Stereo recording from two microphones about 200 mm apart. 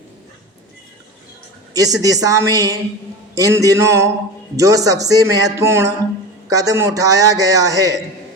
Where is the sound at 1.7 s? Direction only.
15° right (ahead or behind).